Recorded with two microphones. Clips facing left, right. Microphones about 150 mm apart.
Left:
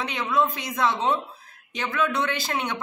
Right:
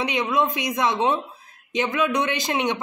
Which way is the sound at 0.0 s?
15° right (ahead or behind).